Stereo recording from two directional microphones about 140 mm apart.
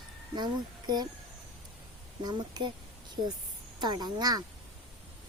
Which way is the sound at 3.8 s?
30° right (ahead or behind).